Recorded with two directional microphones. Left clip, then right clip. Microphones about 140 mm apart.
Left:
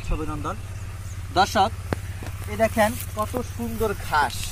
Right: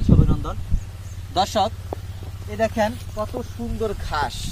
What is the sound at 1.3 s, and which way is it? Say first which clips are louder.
Speech: left 1 dB; 25° right (ahead or behind).